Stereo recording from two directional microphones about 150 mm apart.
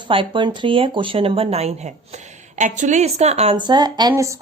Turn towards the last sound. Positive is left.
turn(degrees=-25)  # may be behind; listen again after turning